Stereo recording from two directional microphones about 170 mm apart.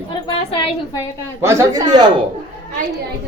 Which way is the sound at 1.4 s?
20° right (ahead or behind).